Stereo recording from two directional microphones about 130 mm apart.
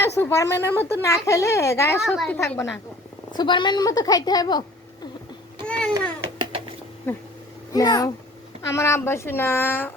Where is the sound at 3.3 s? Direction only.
35° left (ahead or behind).